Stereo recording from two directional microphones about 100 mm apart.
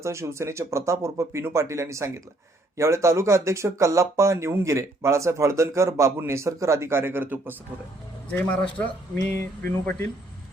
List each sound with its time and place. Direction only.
0.0 s speech: 30° right (ahead or behind)
8.4 s a man's voice: 15° left (ahead or behind)
9.1 s a sound: 25° left (ahead or behind)